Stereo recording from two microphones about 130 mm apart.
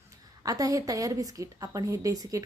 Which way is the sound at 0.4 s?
25° right (ahead or behind).